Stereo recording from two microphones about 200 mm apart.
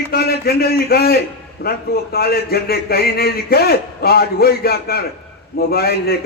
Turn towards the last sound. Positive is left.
turn(degrees=50)  # may be behind; listen again after turning